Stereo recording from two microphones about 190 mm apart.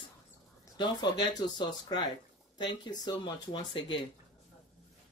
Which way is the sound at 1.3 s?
20° left (ahead or behind).